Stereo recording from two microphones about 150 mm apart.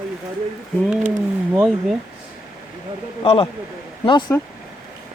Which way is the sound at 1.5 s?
5° right (ahead or behind).